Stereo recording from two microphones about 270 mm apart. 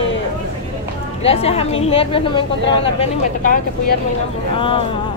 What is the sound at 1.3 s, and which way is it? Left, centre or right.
A woman's voice, left.